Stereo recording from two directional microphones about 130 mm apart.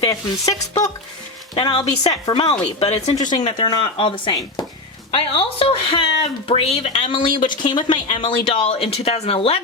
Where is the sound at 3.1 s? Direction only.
35° left (ahead or behind).